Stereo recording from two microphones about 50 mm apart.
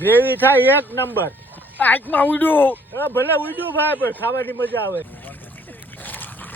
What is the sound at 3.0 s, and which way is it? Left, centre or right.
A man's voice, left.